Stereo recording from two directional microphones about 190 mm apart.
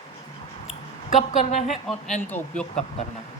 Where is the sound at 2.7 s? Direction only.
35° left (ahead or behind).